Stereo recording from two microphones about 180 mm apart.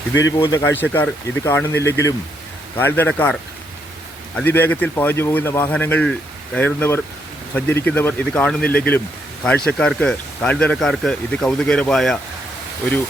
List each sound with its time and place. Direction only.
0.1 s speech: 90° left
0.3 s speech: 25° left (ahead or behind)
0.8 s speech: 10° left (ahead or behind)
4.4 s speech: 10° left (ahead or behind)